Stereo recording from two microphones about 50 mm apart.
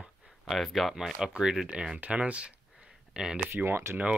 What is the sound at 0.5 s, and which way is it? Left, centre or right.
Speech, centre.